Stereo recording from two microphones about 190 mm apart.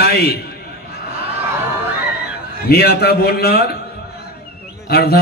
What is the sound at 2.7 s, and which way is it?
A man's voice, 55° left (ahead or behind).